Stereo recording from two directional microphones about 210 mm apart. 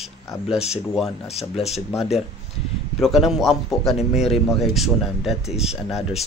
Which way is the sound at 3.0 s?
Centre (ahead or behind).